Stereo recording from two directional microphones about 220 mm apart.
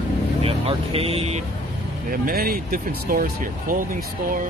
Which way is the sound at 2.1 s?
40° right (ahead or behind).